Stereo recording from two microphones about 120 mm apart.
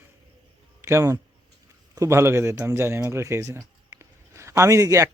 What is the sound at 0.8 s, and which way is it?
Speech, 20° right (ahead or behind).